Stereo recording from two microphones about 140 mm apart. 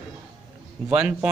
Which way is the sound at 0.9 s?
10° right (ahead or behind).